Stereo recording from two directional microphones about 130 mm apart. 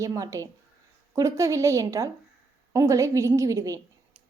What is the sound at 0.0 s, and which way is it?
A woman's voice, 25° right (ahead or behind).